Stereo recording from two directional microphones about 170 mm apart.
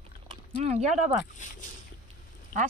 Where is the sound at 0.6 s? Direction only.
40° right (ahead or behind).